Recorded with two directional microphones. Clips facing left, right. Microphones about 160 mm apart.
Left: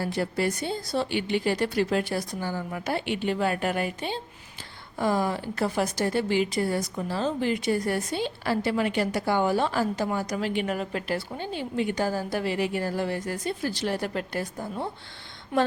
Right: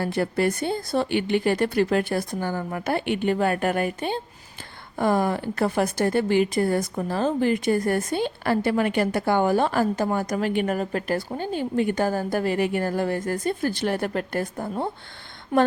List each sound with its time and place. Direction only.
0.0 s speech: 55° right (ahead or behind)
15.5 s speech: 40° right (ahead or behind)